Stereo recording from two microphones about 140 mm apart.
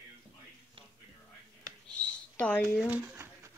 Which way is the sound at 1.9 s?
10° left (ahead or behind).